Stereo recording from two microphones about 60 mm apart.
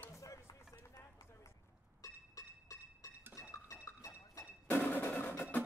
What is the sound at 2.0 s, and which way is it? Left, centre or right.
Music, left.